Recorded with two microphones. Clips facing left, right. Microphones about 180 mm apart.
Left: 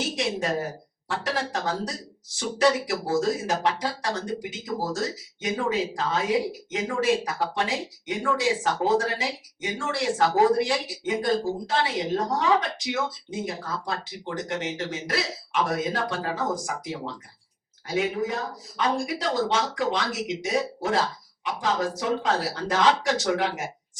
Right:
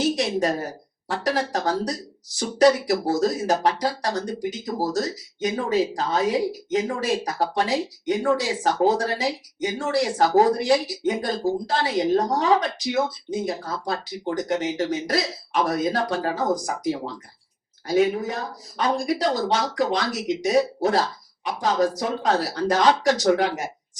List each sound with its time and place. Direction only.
0.2 s speech: 40° right (ahead or behind)